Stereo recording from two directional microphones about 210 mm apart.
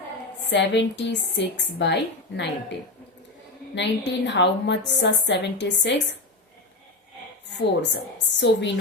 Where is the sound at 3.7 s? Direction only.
55° left (ahead or behind).